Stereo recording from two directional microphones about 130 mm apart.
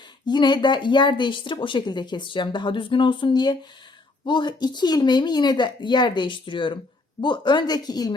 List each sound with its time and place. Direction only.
0.3 s a woman's voice: 35° left (ahead or behind)